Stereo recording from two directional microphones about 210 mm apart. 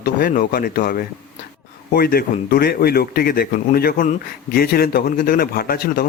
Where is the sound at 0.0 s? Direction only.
45° left (ahead or behind).